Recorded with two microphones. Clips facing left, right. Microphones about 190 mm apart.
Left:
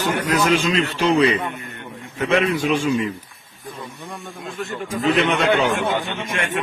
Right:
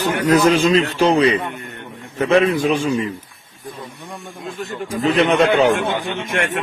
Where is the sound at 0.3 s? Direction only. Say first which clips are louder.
Right 7 dB; 40° right (ahead or behind).